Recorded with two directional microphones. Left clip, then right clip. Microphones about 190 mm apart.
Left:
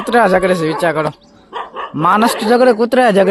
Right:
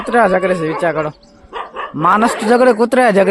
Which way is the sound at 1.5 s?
20° left (ahead or behind).